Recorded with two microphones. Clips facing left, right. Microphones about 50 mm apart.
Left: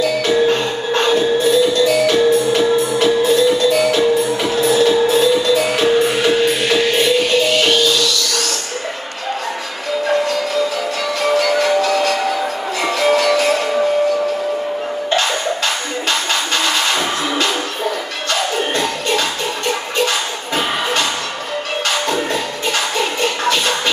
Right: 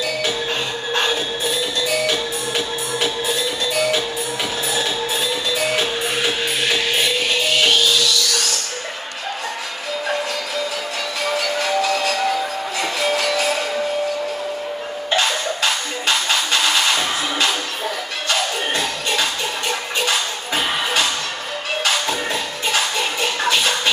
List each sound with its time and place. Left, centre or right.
0.0 s music: centre
11.2 s music: centre
15.0 s music: centre